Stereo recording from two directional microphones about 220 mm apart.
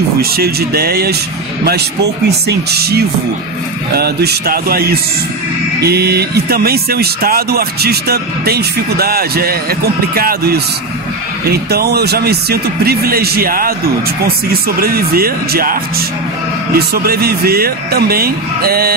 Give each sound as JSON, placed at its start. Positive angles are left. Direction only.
{"t": 0.2, "sound": "speech", "side_deg": -45}
{"t": 2.2, "sound": "speech", "side_deg": -45}